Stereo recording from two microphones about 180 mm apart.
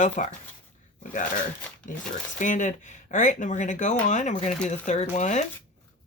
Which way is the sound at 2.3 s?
45° left (ahead or behind).